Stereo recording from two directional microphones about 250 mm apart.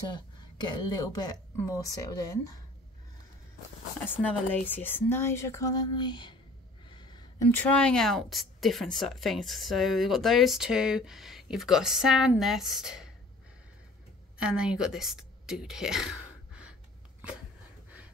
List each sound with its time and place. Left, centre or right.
0.1 s speech: centre
4.0 s speech: centre
14.4 s speech: centre